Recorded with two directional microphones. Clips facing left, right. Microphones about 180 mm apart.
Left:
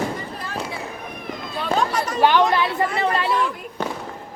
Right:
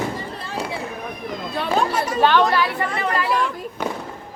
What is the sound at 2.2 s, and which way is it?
Speech, 15° left (ahead or behind).